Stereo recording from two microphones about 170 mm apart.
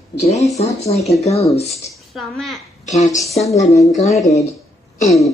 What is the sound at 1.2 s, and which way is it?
Speech, 40° left (ahead or behind).